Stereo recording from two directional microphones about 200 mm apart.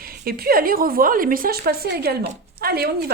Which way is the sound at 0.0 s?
50° right (ahead or behind).